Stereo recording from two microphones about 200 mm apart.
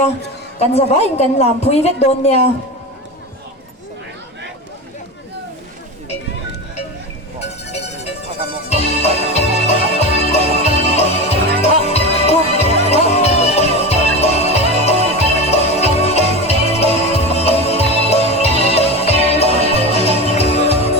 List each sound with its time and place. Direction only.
0.6 s a woman's voice: 30° left (ahead or behind)
8.7 s music: 30° left (ahead or behind)
19.6 s music: 30° right (ahead or behind)
20.0 s music: 30° left (ahead or behind)